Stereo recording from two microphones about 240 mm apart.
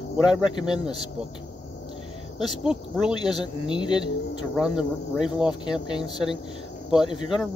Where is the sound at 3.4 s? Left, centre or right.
Centre.